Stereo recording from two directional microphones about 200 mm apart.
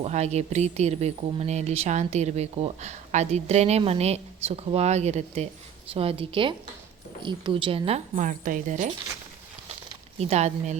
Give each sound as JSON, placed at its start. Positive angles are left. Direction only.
{"t": 0.0, "sound": "a woman's voice", "side_deg": -35}
{"t": 10.2, "sound": "speech", "side_deg": -30}